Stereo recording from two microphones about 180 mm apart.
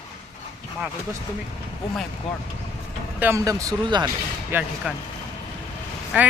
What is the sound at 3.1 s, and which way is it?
Speech, 15° right (ahead or behind).